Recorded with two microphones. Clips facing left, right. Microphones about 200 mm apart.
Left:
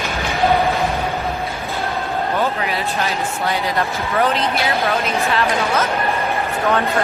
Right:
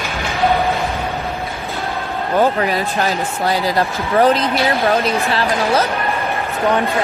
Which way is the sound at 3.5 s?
35° right (ahead or behind).